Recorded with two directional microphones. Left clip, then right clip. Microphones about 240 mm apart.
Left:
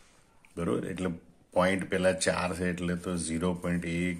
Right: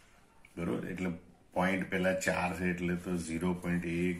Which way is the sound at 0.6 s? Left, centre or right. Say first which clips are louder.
Left 5 dB; left.